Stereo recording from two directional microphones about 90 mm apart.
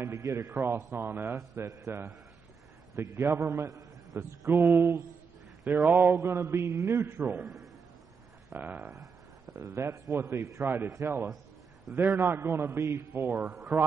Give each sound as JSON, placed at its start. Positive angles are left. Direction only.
{"t": 0.0, "sound": "a man's voice", "side_deg": -30}
{"t": 4.5, "sound": "a man's voice", "side_deg": -25}
{"t": 5.6, "sound": "a man's voice", "side_deg": -15}
{"t": 8.5, "sound": "a man's voice", "side_deg": -20}
{"t": 9.6, "sound": "a man's voice", "side_deg": -30}
{"t": 13.1, "sound": "a man's voice", "side_deg": -25}